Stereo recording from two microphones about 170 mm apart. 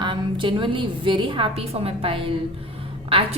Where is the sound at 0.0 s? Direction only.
30° right (ahead or behind).